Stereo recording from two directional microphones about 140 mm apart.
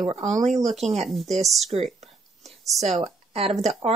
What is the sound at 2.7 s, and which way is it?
Speech, 50° right (ahead or behind).